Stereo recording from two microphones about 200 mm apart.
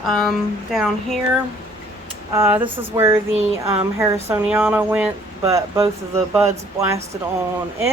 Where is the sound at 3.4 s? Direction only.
30° right (ahead or behind).